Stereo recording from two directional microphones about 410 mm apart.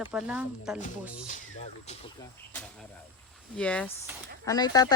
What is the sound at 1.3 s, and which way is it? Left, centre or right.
Speech, centre.